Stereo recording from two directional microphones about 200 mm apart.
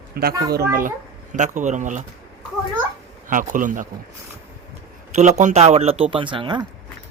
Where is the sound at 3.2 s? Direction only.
40° right (ahead or behind).